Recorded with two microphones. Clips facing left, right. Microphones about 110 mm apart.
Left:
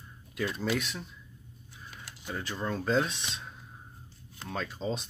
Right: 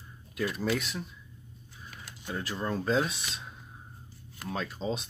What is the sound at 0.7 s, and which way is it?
Speech, centre (ahead or behind).